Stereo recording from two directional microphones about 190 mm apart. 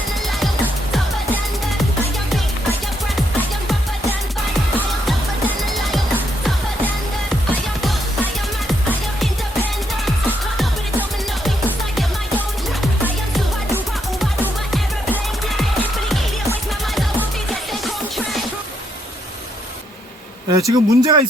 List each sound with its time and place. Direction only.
5.0 s music: centre (ahead or behind)
7.8 s music: centre (ahead or behind)
14.2 s music: 5° right (ahead or behind)
20.5 s speech: 20° right (ahead or behind)